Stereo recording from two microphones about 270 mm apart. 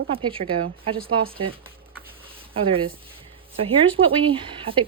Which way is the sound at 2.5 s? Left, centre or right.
Right.